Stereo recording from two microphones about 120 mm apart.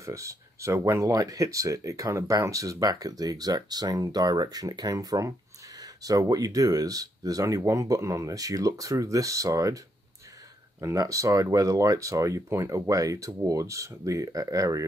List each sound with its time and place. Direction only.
0.0 s speech: 25° right (ahead or behind)
10.8 s speech: 25° right (ahead or behind)